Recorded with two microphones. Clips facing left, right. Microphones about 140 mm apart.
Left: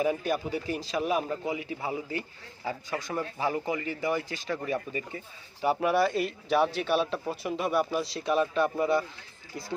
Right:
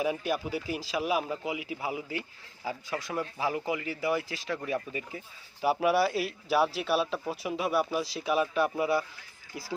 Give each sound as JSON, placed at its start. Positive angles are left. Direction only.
{"t": 0.0, "sound": "speech", "side_deg": -5}